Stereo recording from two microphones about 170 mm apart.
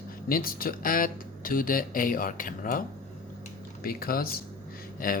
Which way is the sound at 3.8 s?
60° left (ahead or behind).